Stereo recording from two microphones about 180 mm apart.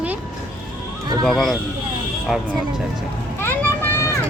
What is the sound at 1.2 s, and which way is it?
Speech, centre (ahead or behind).